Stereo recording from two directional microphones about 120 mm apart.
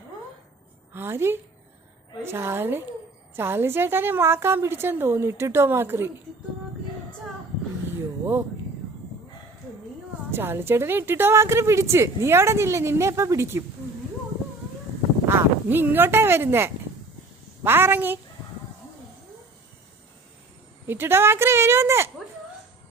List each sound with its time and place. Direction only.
0.9 s a woman's voice: 20° right (ahead or behind)
7.9 s a sound: 20° right (ahead or behind)
10.3 s a woman's voice: 20° right (ahead or behind)
15.3 s a woman's voice: 20° right (ahead or behind)
20.8 s a woman's voice: 20° right (ahead or behind)